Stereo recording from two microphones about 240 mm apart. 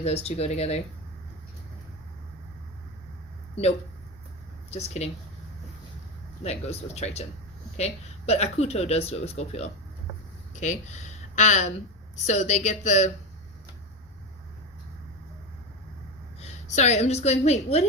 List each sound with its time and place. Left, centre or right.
0.0 s speech: left
3.5 s speech: left
5.0 s speech: left
6.4 s speech: left
8.3 s speech: left
16.4 s a woman's voice: left